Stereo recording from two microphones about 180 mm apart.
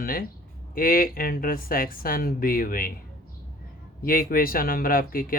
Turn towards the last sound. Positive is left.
turn(degrees=50)  # may be behind; listen again after turning